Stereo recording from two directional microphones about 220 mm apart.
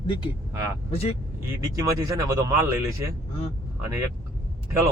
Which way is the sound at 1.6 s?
15° right (ahead or behind).